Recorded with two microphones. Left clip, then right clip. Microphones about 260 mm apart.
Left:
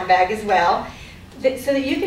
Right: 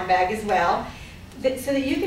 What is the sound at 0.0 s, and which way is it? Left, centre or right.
A woman's voice, centre.